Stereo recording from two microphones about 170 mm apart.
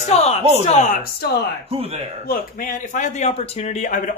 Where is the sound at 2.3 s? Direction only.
50° left (ahead or behind).